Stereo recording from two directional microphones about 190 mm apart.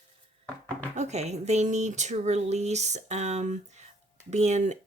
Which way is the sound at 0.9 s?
35° right (ahead or behind).